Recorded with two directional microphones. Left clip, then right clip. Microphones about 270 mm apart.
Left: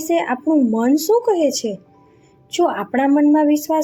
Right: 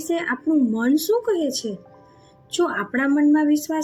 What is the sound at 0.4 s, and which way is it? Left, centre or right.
Speech, left.